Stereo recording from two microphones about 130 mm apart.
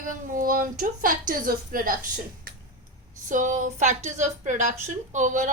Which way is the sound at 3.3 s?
80° right.